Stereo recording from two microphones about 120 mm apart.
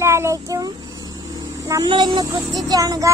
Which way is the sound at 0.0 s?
25° right (ahead or behind).